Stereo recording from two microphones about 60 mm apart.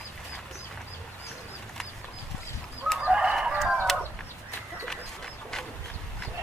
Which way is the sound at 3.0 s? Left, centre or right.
Centre.